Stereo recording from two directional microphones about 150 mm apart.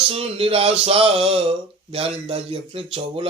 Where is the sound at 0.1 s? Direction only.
40° right (ahead or behind).